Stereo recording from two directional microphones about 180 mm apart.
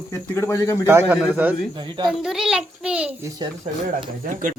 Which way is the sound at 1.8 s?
25° right (ahead or behind).